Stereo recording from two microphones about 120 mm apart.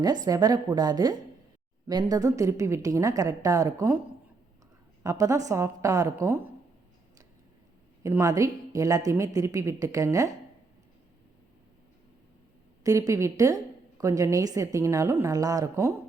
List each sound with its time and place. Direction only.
0.3 s a woman's voice: 30° right (ahead or behind)
5.0 s a woman's voice: 30° right (ahead or behind)
8.0 s a woman's voice: 25° right (ahead or behind)
12.8 s a woman's voice: 25° right (ahead or behind)